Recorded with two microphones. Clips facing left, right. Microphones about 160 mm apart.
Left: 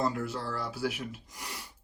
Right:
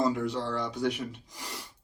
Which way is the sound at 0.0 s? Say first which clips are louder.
Right 4 dB; centre (ahead or behind).